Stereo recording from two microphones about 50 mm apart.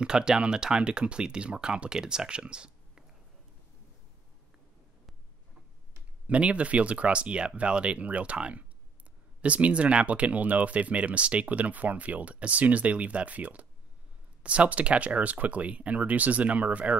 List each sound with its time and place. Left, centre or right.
0.0 s speech: centre
6.2 s speech: right